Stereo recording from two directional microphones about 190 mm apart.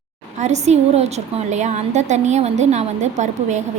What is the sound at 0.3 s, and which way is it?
A woman's voice, 35° right (ahead or behind).